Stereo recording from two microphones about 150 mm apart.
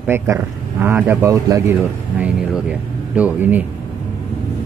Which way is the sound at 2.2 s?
10° right (ahead or behind).